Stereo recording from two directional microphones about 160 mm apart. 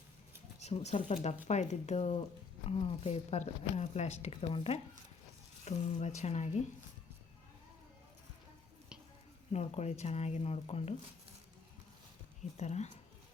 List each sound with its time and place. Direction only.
0.6 s speech: 40° left (ahead or behind)
9.5 s speech: 40° left (ahead or behind)
12.5 s speech: 45° left (ahead or behind)